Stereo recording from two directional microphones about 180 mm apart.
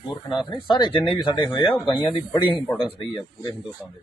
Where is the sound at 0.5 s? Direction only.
25° left (ahead or behind).